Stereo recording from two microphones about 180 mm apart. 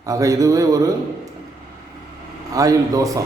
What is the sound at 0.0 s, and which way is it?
Speech, 20° right (ahead or behind).